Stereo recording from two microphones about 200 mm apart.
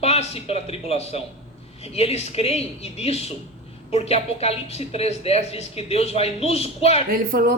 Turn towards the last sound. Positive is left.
turn(degrees=-45)  # may be behind; listen again after turning